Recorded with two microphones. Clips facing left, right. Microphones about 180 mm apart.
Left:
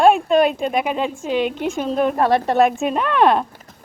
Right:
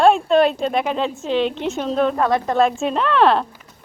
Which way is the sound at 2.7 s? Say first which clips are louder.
Even; 10° left (ahead or behind).